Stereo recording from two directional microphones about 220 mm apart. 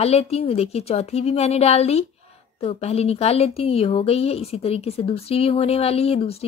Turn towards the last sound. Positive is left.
turn(degrees=25)  # may be behind; listen again after turning